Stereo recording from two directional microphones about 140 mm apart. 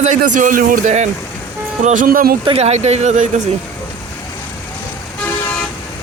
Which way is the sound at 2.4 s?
45° right (ahead or behind).